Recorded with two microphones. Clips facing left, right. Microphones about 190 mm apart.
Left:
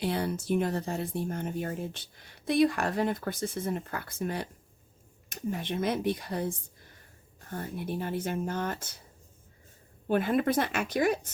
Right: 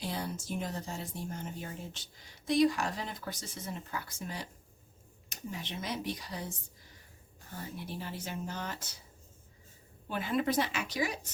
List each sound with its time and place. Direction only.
0.0 s speech: 65° left (ahead or behind)
10.1 s speech: 55° left (ahead or behind)